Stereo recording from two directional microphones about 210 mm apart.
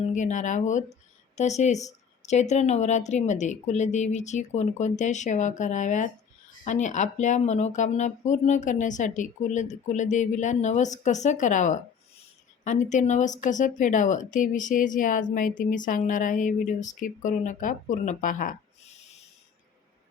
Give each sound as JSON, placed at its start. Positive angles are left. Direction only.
{"t": 0.0, "sound": "speech", "side_deg": 35}